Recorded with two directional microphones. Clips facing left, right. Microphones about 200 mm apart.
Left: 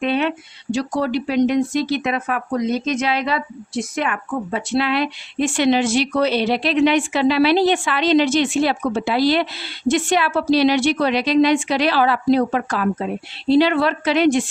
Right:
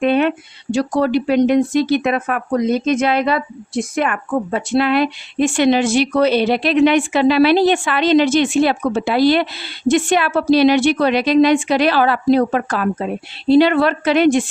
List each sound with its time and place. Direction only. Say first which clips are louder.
0.0 s speech: right 5 dB; 50° right (ahead or behind)